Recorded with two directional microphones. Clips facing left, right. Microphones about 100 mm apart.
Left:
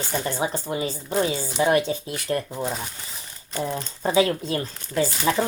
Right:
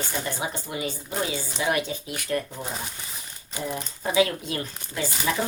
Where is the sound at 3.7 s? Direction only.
30° left (ahead or behind).